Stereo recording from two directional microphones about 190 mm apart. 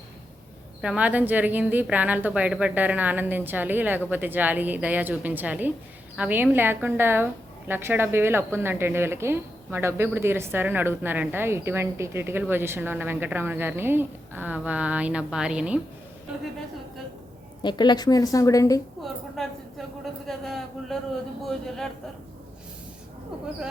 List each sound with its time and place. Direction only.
0.8 s a woman's voice: 5° right (ahead or behind)
17.6 s a woman's voice: 25° left (ahead or behind)
19.4 s speech: centre (ahead or behind)